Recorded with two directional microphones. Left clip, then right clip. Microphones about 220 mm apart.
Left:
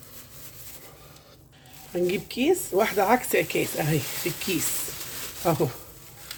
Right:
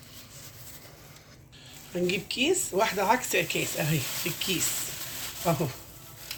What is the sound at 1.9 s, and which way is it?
Speech, 40° left (ahead or behind).